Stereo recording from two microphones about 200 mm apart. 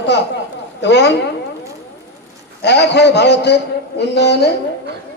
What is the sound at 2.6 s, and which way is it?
A man's voice, 55° left (ahead or behind).